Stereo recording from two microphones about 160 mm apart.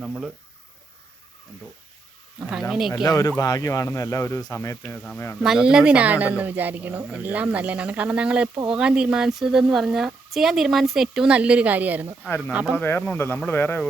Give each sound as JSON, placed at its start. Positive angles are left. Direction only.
{"t": 0.0, "sound": "speech", "side_deg": 0}
{"t": 2.5, "sound": "speech", "side_deg": 0}
{"t": 2.9, "sound": "speech", "side_deg": 20}
{"t": 5.4, "sound": "speech", "side_deg": -5}
{"t": 12.7, "sound": "speech", "side_deg": 10}